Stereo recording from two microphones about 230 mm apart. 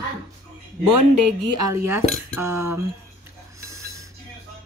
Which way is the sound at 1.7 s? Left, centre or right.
Centre.